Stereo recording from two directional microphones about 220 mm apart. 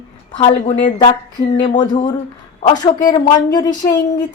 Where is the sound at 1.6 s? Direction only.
20° left (ahead or behind).